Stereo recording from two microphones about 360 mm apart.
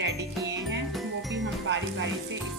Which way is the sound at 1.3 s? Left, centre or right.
Right.